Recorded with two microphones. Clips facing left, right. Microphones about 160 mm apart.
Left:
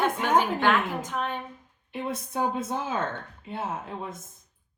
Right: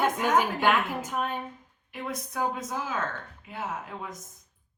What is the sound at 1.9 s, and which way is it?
A woman's voice, 25° left (ahead or behind).